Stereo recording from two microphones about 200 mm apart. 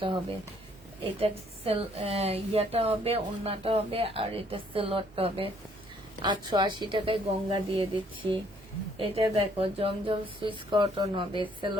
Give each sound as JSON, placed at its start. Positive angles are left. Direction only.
{"t": 1.2, "sound": "a woman's voice", "side_deg": -30}